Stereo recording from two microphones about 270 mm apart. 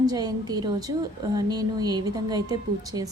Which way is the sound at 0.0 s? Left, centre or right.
Centre.